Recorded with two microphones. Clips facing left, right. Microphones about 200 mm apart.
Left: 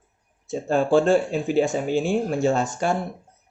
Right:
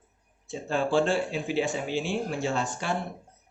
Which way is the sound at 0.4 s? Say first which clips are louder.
Left 6 dB; 45° left (ahead or behind).